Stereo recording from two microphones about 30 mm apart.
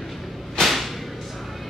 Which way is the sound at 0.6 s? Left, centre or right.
Centre.